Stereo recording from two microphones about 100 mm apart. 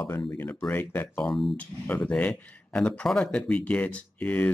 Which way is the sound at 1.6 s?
10° left (ahead or behind).